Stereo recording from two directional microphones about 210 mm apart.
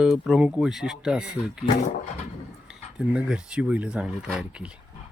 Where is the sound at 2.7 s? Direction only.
5° right (ahead or behind).